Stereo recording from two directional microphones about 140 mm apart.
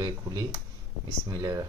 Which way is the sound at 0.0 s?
25° right (ahead or behind).